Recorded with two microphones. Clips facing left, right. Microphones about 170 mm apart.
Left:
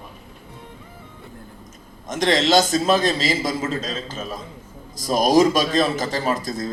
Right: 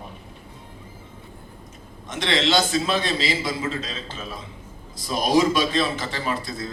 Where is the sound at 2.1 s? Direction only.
40° left (ahead or behind).